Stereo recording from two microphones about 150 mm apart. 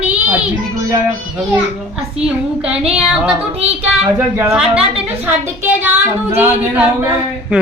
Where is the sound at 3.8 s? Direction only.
15° right (ahead or behind).